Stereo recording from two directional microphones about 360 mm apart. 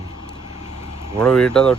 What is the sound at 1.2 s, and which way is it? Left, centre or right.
Speech, centre.